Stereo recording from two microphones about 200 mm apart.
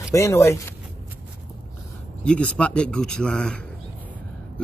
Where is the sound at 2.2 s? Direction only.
5° left (ahead or behind).